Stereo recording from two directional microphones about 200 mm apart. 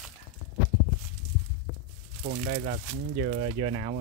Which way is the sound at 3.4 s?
30° right (ahead or behind).